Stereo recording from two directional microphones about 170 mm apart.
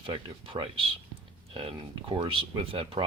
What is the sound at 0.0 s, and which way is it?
Speech, 30° right (ahead or behind).